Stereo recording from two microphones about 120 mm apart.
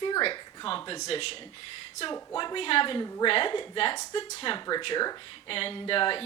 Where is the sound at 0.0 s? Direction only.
45° left (ahead or behind).